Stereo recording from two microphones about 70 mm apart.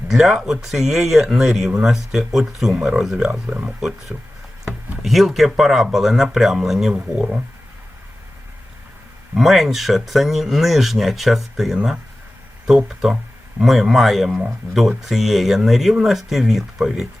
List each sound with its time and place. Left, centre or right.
0.1 s speech: centre
3.4 s speech: centre
5.0 s speech: centre
9.3 s speech: centre